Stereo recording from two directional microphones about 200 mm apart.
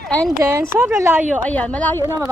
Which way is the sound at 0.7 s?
10° right (ahead or behind).